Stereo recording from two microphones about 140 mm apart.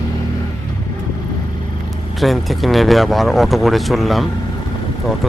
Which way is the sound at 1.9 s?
Centre (ahead or behind).